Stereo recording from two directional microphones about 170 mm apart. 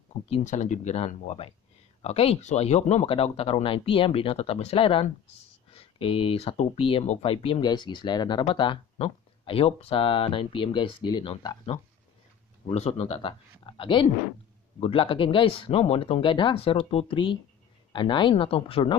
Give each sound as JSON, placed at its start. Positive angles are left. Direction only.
{"t": 0.3, "sound": "speech", "side_deg": 45}